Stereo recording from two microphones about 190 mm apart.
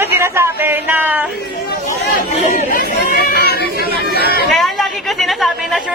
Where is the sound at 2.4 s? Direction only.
45° left (ahead or behind).